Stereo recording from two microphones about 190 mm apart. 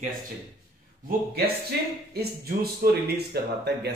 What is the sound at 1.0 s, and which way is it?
Speech, 55° right (ahead or behind).